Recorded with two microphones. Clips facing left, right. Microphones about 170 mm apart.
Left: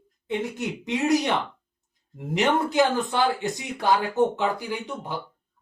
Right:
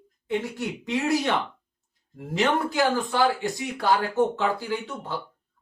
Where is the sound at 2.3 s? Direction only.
20° left (ahead or behind).